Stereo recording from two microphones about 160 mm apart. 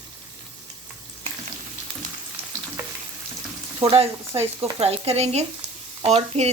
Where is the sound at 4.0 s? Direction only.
40° right (ahead or behind).